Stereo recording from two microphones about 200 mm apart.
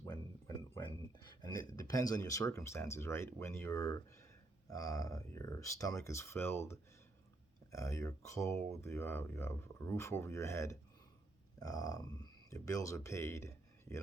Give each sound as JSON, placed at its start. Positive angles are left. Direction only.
{"t": 0.0, "sound": "music", "side_deg": 15}
{"t": 1.2, "sound": "speech", "side_deg": 20}